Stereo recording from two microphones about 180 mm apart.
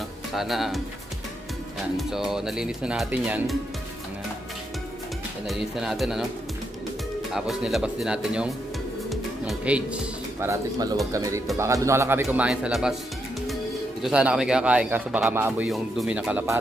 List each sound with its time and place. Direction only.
0.3 s speech: centre (ahead or behind)
2.0 s speech: centre (ahead or behind)
5.5 s speech: centre (ahead or behind)
7.3 s speech: centre (ahead or behind)
9.1 s music: 5° right (ahead or behind)
10.4 s speech: 20° right (ahead or behind)
14.0 s speech: 5° right (ahead or behind)